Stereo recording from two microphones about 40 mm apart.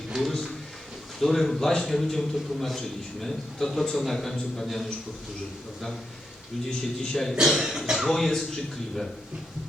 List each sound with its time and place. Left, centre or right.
0.1 s a sound: centre
1.2 s a man's voice: centre
6.7 s a man's voice: centre
7.3 s speech: centre
7.9 s a man's voice: centre